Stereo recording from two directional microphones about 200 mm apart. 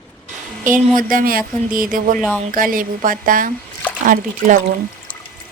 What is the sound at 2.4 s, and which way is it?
A woman's voice, 45° right (ahead or behind).